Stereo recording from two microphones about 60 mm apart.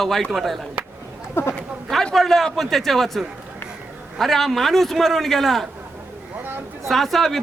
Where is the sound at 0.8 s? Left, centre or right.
Centre.